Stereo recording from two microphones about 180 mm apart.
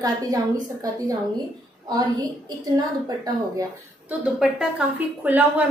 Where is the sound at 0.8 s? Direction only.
20° right (ahead or behind).